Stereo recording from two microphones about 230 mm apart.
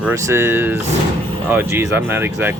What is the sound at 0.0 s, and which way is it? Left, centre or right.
Speech, centre.